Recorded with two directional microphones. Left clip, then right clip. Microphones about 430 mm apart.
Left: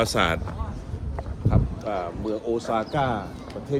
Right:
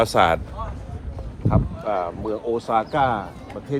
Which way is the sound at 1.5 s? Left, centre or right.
Centre.